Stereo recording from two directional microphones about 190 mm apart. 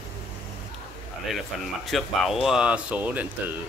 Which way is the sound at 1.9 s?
Centre (ahead or behind).